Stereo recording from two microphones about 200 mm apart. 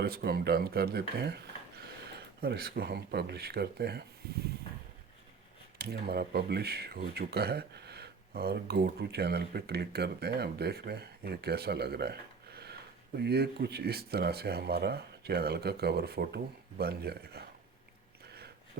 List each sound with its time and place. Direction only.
0.0 s speech: 50° right (ahead or behind)
5.8 s speech: 50° right (ahead or behind)
13.1 s speech: 55° right (ahead or behind)